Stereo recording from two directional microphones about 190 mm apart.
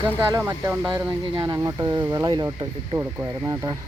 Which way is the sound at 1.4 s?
15° right (ahead or behind).